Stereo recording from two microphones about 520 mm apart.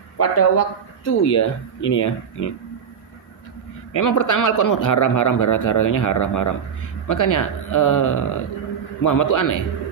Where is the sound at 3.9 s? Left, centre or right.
Left.